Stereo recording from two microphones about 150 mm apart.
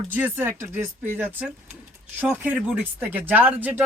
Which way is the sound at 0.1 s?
15° right (ahead or behind).